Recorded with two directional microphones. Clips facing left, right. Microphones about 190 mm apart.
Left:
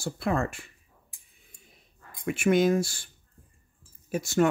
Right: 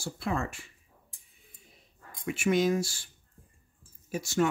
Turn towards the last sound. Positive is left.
turn(degrees=55)  # may be behind; listen again after turning